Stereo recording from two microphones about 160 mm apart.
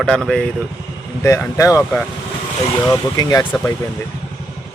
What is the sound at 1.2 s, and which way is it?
Speech, 20° left (ahead or behind).